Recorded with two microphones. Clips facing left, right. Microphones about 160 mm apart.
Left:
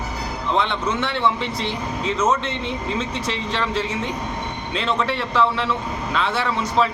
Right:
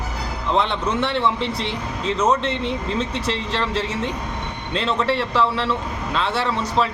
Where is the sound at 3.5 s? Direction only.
Centre (ahead or behind).